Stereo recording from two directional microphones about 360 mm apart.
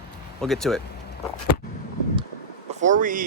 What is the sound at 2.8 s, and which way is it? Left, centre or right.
Speech, right.